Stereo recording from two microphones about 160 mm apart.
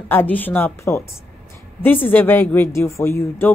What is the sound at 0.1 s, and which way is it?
Speech, 10° left (ahead or behind).